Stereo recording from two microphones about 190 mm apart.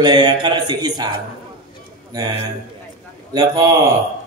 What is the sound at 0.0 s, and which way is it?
Speech, 20° right (ahead or behind).